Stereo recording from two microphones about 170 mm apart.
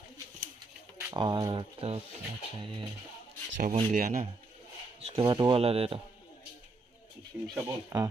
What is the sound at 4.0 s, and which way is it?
Speech, 55° right (ahead or behind).